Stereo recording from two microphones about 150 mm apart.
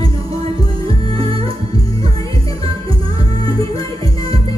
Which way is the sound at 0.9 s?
35° right (ahead or behind).